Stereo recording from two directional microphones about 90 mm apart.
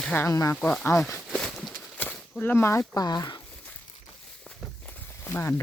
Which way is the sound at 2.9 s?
50° left (ahead or behind).